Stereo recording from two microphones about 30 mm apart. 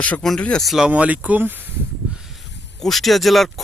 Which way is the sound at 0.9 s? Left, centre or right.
Right.